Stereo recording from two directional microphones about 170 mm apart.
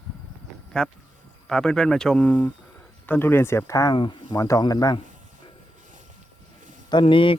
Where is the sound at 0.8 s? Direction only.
5° left (ahead or behind); by 5.0 s 25° left (ahead or behind).